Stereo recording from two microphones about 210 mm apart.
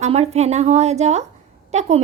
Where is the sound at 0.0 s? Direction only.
30° right (ahead or behind).